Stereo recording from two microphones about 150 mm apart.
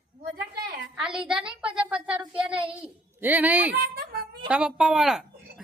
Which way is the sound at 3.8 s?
90° right.